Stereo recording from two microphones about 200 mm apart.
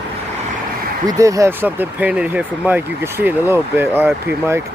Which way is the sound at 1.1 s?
15° right (ahead or behind).